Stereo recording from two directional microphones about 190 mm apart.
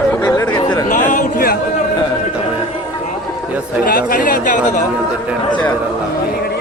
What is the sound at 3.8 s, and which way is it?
Speech, 50° left (ahead or behind).